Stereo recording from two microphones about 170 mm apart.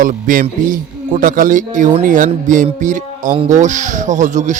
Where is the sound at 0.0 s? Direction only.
55° right (ahead or behind).